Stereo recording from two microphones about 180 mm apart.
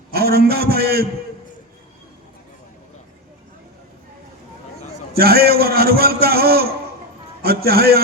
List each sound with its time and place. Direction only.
0.1 s a man's voice: 60° right (ahead or behind)
5.1 s a man's voice: 60° right (ahead or behind)